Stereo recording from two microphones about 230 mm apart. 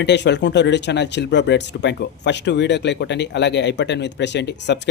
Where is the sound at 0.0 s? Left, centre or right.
Left.